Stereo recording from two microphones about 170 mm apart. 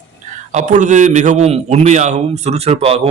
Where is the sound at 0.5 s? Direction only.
45° right (ahead or behind).